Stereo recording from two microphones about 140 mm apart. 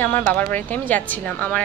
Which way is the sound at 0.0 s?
10° left (ahead or behind).